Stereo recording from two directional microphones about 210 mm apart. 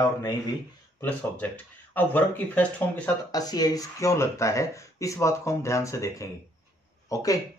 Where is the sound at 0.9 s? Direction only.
10° left (ahead or behind).